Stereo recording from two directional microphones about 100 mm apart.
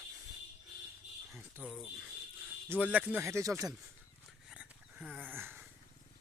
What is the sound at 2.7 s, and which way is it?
Speech, 15° right (ahead or behind).